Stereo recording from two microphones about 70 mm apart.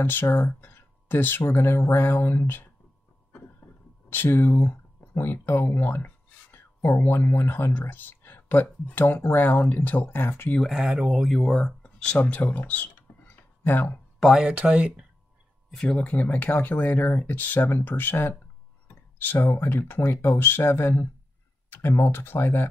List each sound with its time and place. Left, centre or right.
0.0 s speech: left
4.1 s speech: left
10.7 s speech: centre
11.2 s speech: centre
11.5 s speech: centre
12.2 s a sound: left
14.4 s speech: centre
15.7 s speech: centre; by 21.1 s left
21.6 s computer keyboard: left
22.0 s speech: left